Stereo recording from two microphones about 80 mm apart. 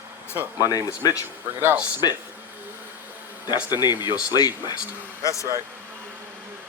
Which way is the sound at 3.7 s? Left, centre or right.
Left.